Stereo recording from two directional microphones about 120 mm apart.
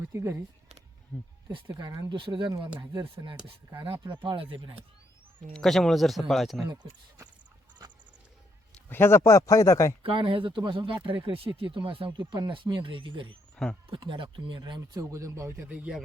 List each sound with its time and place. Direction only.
0.0 s speech: 25° right (ahead or behind)
1.5 s speech: 35° right (ahead or behind)
2.0 s speech: 40° right (ahead or behind)
2.9 s speech: 30° right (ahead or behind)
4.0 s speech: 40° right (ahead or behind)
5.5 s speech: 5° left (ahead or behind)
8.9 s speech: 20° left (ahead or behind)
10.0 s speech: 45° right (ahead or behind)
13.6 s speech: 5° left (ahead or behind)
13.9 s speech: 40° right (ahead or behind); by 15.5 s 25° right (ahead or behind)
15.7 s speech: 10° right (ahead or behind)